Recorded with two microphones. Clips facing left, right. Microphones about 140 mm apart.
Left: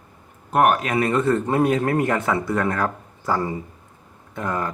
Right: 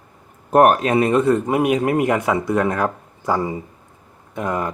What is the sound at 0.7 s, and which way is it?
A man's voice, 25° right (ahead or behind).